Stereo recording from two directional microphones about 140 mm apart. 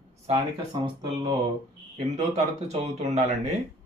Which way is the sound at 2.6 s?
50° right (ahead or behind).